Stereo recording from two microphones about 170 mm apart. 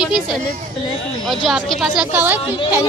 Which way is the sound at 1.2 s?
Centre (ahead or behind).